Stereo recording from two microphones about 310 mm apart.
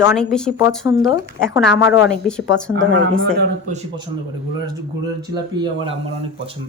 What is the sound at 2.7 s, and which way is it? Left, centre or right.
Speech, right.